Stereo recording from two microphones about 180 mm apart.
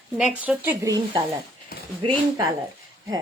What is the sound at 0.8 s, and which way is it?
Speech, 20° right (ahead or behind).